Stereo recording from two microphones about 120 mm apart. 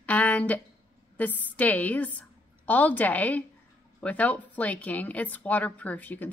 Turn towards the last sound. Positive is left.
turn(degrees=15)  # may be behind; listen again after turning